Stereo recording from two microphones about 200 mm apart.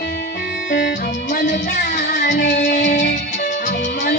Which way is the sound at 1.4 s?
60° left (ahead or behind).